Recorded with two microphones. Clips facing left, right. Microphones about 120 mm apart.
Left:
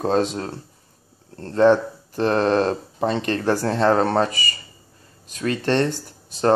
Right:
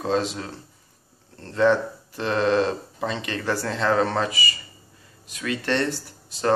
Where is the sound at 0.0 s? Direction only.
45° left (ahead or behind).